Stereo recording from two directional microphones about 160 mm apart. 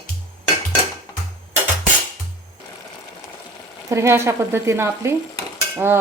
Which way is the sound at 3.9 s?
15° right (ahead or behind).